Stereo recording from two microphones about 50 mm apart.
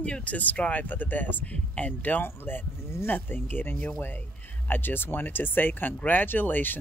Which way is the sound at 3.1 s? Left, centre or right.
Left.